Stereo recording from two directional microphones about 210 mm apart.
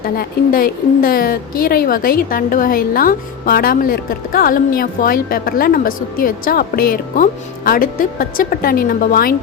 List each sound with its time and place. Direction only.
0.0 s a woman's voice: 45° left (ahead or behind)